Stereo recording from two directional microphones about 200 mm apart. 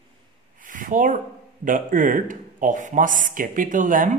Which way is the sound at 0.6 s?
40° right (ahead or behind).